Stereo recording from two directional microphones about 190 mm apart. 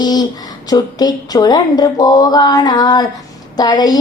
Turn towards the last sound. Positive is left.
turn(degrees=20)  # may be behind; listen again after turning